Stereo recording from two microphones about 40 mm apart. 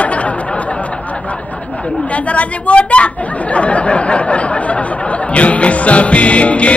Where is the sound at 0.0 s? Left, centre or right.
Left.